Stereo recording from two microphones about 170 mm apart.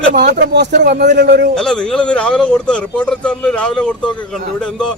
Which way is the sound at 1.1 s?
85° right.